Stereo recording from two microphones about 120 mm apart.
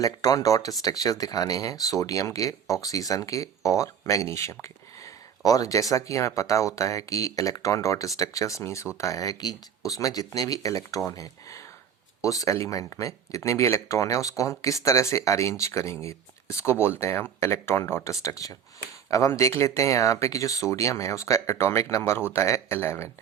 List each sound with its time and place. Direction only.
0.0 s speech: 30° left (ahead or behind)